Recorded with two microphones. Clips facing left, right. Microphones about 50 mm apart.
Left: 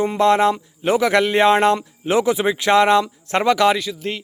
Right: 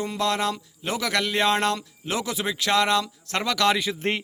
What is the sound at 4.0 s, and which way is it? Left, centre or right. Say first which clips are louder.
Speech: even; right.